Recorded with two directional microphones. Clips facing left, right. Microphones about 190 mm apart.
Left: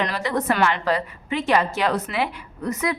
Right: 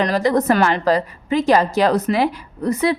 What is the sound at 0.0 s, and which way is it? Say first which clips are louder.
A woman's voice: right 7 dB; 40° right (ahead or behind).